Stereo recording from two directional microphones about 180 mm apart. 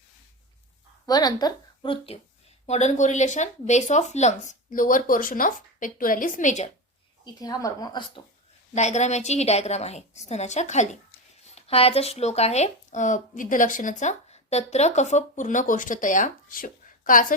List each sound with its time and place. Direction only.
1.0 s a woman's voice: 20° left (ahead or behind)
2.6 s speech: 40° left (ahead or behind)
7.3 s speech: 20° left (ahead or behind)
8.7 s a woman's voice: 40° left (ahead or behind)